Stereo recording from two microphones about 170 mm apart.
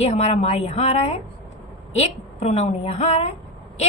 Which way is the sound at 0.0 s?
40° left (ahead or behind).